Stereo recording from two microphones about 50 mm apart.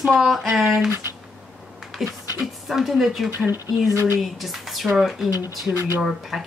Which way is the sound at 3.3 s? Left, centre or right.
Right.